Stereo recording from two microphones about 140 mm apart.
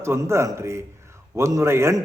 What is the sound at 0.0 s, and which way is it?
A man's voice, 20° right (ahead or behind).